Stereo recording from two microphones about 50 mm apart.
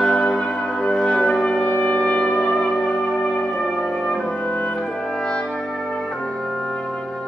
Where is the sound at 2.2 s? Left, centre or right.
Centre.